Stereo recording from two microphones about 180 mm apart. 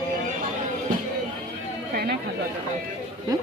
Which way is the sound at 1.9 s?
60° right (ahead or behind).